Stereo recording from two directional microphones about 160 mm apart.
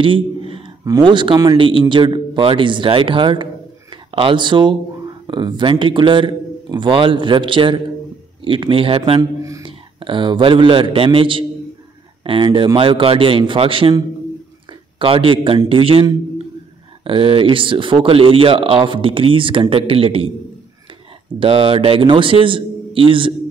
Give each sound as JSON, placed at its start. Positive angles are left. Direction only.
{"t": 0.0, "sound": "speech", "side_deg": -35}
{"t": 9.2, "sound": "a man's voice", "side_deg": -20}
{"t": 9.7, "sound": "a man's voice", "side_deg": -30}
{"t": 21.4, "sound": "speech", "side_deg": -35}